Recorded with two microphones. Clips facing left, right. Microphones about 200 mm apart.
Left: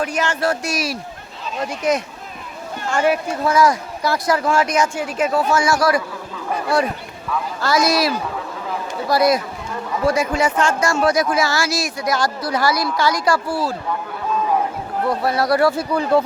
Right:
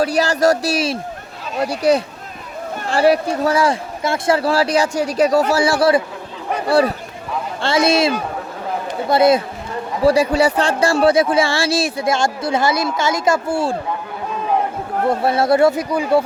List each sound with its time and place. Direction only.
0.0 s speech: 35° right (ahead or behind)
15.0 s speech: 25° right (ahead or behind)